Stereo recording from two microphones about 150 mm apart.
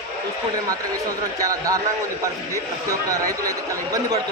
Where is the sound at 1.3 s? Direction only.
20° right (ahead or behind).